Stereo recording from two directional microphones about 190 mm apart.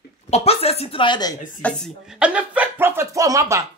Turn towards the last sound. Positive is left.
turn(degrees=-15)  # may be behind; listen again after turning